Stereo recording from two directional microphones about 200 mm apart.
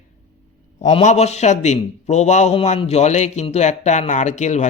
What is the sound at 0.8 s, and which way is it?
Speech, 35° left (ahead or behind).